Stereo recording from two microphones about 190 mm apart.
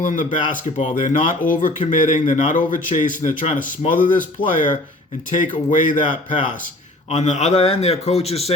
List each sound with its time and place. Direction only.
0.0 s speech: 45° left (ahead or behind)
0.5 s a man's voice: 30° left (ahead or behind)
1.1 s speech: 45° left (ahead or behind)
7.1 s a man's voice: 35° left (ahead or behind)